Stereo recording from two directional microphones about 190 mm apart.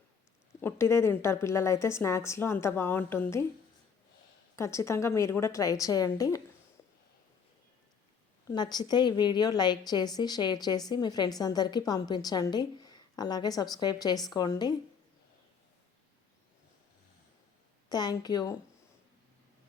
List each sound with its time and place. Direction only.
0.6 s a woman's voice: 15° left (ahead or behind)
4.5 s a woman's voice: 15° left (ahead or behind)
8.4 s a woman's voice: 20° left (ahead or behind)
17.8 s a woman's voice: 20° left (ahead or behind)